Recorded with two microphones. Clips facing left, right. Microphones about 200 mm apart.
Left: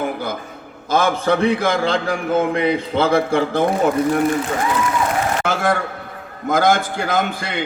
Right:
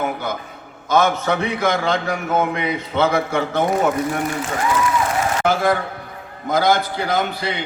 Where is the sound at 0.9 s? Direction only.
30° left (ahead or behind).